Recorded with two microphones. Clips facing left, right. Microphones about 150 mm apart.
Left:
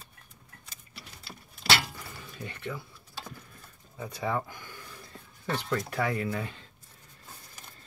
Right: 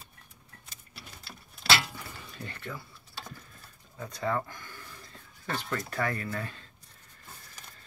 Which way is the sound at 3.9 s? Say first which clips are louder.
Even; 10° left (ahead or behind).